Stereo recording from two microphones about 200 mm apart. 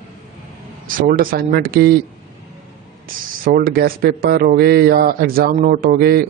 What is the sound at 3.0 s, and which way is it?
Speech, 45° right (ahead or behind).